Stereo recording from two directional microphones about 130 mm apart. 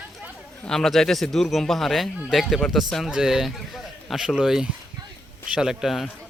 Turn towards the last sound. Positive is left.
turn(degrees=0)  # may be behind; listen again after turning